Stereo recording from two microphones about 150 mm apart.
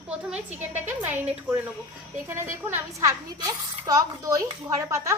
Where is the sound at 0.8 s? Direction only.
10° right (ahead or behind).